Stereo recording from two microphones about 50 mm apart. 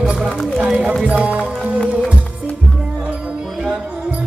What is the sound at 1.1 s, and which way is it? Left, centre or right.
Speech, centre.